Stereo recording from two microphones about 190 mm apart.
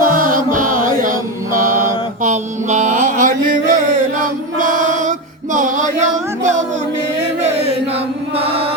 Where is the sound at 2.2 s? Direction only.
40° right (ahead or behind).